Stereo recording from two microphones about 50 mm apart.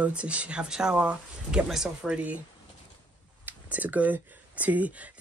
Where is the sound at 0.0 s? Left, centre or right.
Right.